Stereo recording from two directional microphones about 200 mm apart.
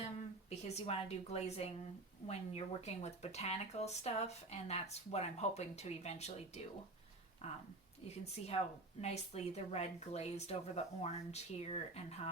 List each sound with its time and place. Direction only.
0.6 s speech: 30° left (ahead or behind)